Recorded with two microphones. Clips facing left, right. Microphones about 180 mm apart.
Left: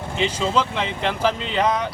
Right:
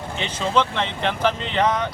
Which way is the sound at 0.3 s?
5° left (ahead or behind).